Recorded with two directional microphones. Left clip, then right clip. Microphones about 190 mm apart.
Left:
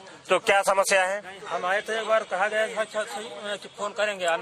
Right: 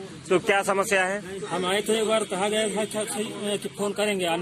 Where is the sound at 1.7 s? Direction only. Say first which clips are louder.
Right 1 dB; centre (ahead or behind).